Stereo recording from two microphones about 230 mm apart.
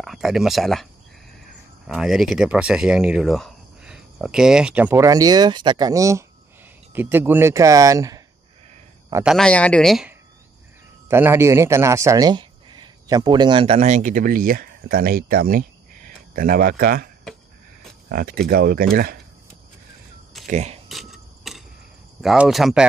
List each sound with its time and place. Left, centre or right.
0.0 s speech: centre
1.9 s speech: centre
9.1 s a man's voice: centre; by 17.1 s right
18.1 s speech: right
20.4 s speech: right
20.9 s a sound: centre
22.2 s speech: centre